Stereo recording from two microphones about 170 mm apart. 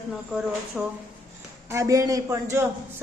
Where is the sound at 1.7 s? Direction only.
20° right (ahead or behind).